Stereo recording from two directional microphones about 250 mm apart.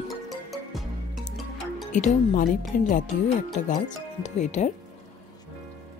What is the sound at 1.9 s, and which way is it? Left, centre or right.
A woman's voice, left.